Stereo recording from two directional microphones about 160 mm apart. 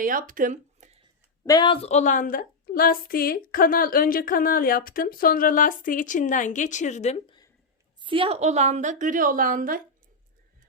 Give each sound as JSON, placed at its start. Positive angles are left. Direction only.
{"t": 0.0, "sound": "speech", "side_deg": -60}
{"t": 1.5, "sound": "a woman's voice", "side_deg": 25}
{"t": 8.0, "sound": "a woman's voice", "side_deg": -35}